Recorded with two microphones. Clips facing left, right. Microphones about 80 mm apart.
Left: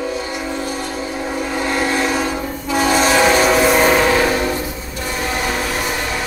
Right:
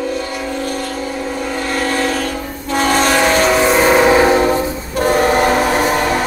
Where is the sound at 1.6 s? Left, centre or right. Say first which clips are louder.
Even; centre.